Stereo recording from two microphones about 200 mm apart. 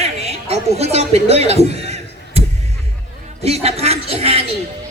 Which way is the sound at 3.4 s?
30° right (ahead or behind).